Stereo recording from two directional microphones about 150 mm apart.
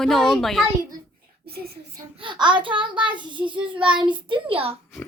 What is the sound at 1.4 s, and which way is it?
Speech, 90° right.